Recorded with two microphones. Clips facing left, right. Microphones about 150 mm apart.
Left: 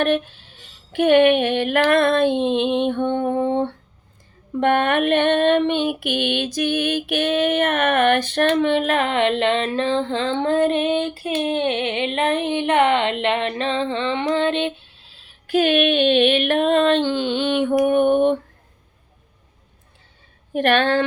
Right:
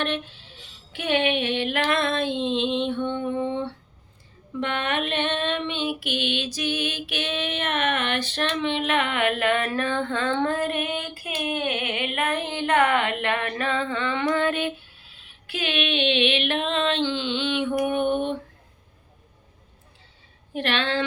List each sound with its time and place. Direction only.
0.0 s speech: 50° left (ahead or behind)
1.9 s female singing: 50° left (ahead or behind)
17.8 s a sound: 50° left (ahead or behind)
20.5 s female singing: 50° left (ahead or behind)